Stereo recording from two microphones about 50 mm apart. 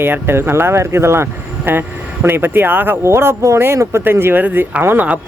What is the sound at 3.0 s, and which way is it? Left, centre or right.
Speech, right.